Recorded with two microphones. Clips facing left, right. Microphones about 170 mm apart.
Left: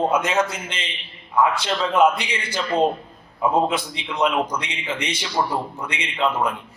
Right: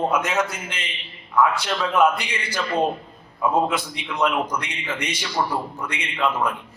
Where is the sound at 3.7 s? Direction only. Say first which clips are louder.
Left 1 dB; 25° left (ahead or behind).